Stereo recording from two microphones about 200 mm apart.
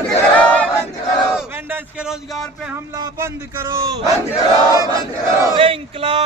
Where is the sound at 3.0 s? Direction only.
15° right (ahead or behind).